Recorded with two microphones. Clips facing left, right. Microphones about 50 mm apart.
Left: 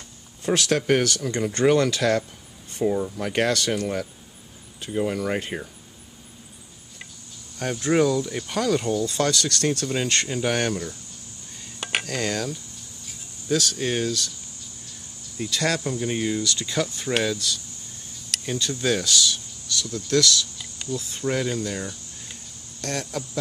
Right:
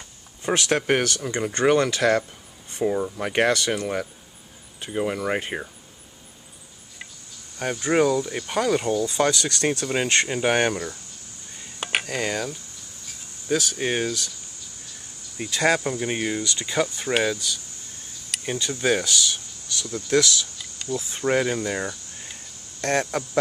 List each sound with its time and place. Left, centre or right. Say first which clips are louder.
0.5 s speech: left 1 dB; right
7.5 s speech: even; centre
11.8 s speech: right 1 dB; centre
15.3 s speech: right 3 dB; right